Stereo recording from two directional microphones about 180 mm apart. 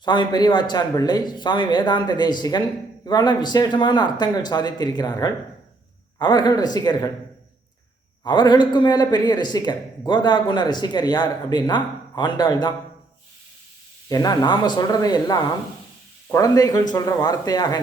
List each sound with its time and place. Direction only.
0.0 s a man's voice: 25° left (ahead or behind)
8.2 s a man's voice: 25° left (ahead or behind)
14.1 s a man's voice: 20° left (ahead or behind)